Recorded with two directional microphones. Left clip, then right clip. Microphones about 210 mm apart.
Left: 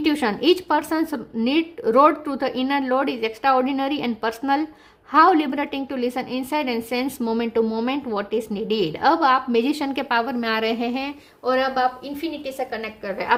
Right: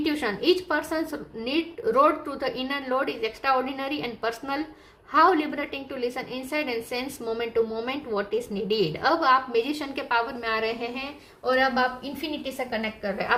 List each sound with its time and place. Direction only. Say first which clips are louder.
0.0 s a woman's voice: left 5 dB; 45° left (ahead or behind)